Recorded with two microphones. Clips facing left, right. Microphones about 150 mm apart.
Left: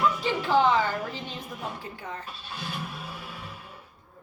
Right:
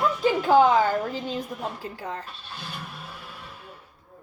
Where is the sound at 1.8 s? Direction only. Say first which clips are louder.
Right 4 dB; 40° right (ahead or behind).